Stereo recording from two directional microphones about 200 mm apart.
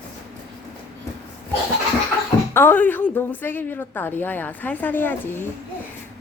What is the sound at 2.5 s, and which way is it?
A woman's voice, 10° left (ahead or behind).